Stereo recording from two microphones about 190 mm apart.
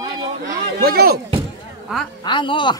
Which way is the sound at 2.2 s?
25° left (ahead or behind).